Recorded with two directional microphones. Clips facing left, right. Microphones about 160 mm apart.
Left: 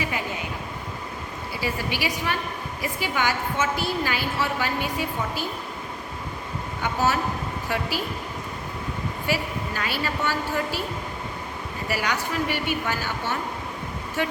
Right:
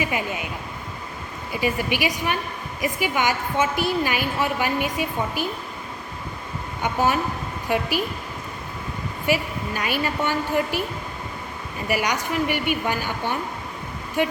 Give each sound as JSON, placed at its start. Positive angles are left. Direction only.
{"t": 1.5, "sound": "a woman's voice", "side_deg": -15}
{"t": 6.8, "sound": "a woman's voice", "side_deg": -15}
{"t": 9.2, "sound": "a woman's voice", "side_deg": -15}
{"t": 11.9, "sound": "a woman's voice", "side_deg": -15}